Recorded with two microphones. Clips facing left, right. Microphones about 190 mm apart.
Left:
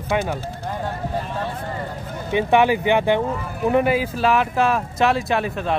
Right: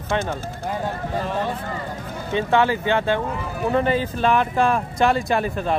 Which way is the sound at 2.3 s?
15° left (ahead or behind).